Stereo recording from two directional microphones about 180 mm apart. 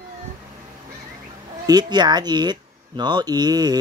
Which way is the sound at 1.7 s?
25° right (ahead or behind).